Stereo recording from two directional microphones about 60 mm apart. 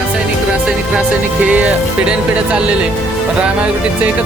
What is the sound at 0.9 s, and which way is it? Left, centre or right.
Speech, right.